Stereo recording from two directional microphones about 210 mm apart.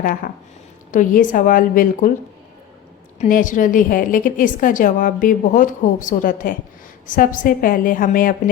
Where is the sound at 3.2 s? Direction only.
40° left (ahead or behind).